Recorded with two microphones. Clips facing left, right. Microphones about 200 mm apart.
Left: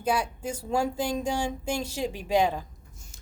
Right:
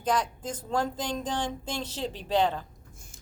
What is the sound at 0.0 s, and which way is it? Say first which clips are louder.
Speech: left 1 dB; 10° left (ahead or behind).